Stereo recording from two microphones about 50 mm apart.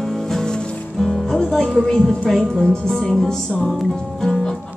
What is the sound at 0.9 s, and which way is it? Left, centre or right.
Music, centre.